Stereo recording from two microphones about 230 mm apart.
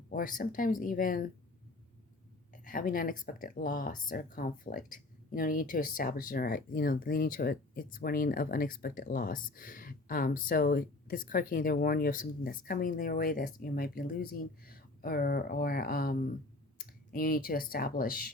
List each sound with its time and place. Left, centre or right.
0.1 s speech: left
2.5 s speech: left